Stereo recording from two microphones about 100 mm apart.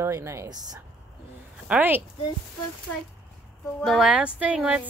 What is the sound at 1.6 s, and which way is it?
Speech, 15° right (ahead or behind).